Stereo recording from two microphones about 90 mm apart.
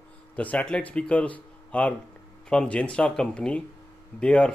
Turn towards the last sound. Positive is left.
turn(degrees=10)  # may be behind; listen again after turning